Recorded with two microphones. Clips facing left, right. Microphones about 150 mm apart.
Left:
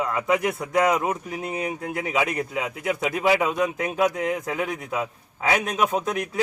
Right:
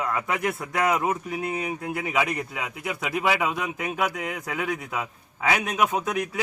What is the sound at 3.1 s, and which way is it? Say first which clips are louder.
A man's voice: left 2 dB; 5° right (ahead or behind).